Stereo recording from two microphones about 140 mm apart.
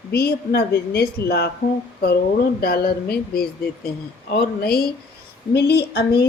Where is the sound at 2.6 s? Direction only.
90° left.